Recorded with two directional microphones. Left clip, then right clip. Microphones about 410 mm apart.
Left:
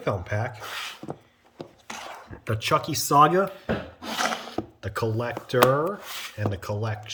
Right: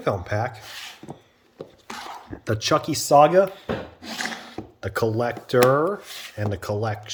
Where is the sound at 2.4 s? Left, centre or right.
Centre.